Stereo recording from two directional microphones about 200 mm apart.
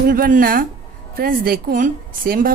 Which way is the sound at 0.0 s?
45° right (ahead or behind).